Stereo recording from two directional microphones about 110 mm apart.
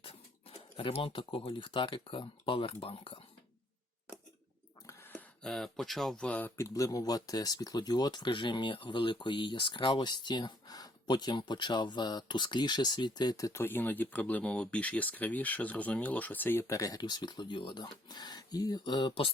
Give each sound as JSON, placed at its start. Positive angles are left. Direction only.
{"t": 0.0, "sound": "speech", "side_deg": 55}
{"t": 4.9, "sound": "a sound", "side_deg": 20}
{"t": 5.4, "sound": "speech", "side_deg": 5}
{"t": 6.6, "sound": "speech", "side_deg": 30}